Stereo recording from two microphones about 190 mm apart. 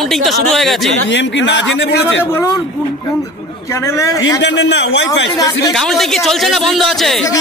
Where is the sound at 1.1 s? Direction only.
75° left (ahead or behind).